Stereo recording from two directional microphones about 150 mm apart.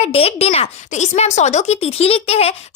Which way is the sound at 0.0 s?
40° left (ahead or behind).